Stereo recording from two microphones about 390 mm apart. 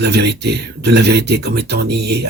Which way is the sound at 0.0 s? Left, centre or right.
Right.